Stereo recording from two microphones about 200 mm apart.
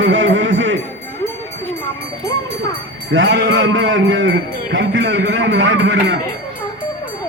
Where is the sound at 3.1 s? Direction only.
65° right (ahead or behind).